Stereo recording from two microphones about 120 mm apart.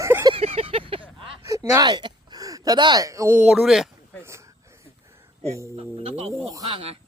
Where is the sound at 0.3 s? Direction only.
55° right (ahead or behind).